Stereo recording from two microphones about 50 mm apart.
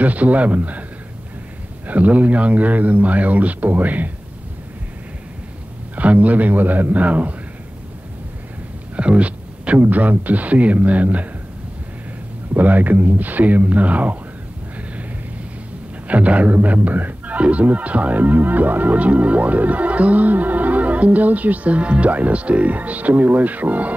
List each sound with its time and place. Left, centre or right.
0.0 s speech: right
1.9 s speech: right
5.9 s speech: right
8.9 s speech: right
12.5 s speech: right
16.1 s speech: right